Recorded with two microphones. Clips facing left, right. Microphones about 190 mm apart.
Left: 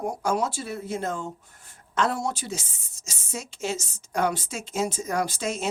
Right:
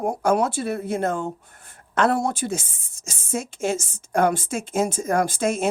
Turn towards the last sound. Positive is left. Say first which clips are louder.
# right 6 dB
turn(degrees=-55)  # may be behind; listen again after turning